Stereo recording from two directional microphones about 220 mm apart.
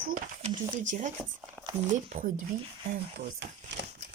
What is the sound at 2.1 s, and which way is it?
Speech, 40° right (ahead or behind).